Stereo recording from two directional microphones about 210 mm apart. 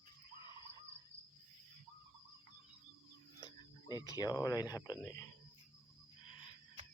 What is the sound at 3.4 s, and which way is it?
Speech, 20° left (ahead or behind).